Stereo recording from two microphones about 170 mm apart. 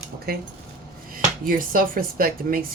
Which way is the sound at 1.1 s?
55° right (ahead or behind).